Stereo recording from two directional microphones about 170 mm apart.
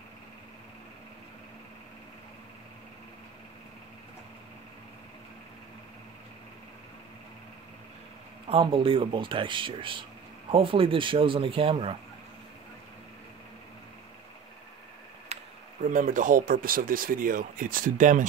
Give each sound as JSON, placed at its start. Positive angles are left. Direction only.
{"t": 8.5, "sound": "speech", "side_deg": -30}
{"t": 15.3, "sound": "a sound", "side_deg": -40}
{"t": 15.8, "sound": "speech", "side_deg": -50}